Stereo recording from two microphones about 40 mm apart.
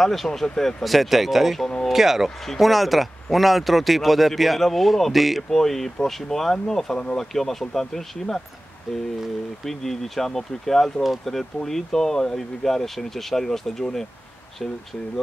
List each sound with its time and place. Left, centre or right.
0.0 s speech: centre
0.8 s speech: centre